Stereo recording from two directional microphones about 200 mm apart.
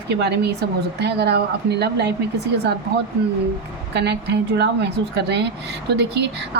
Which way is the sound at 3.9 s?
60° right (ahead or behind).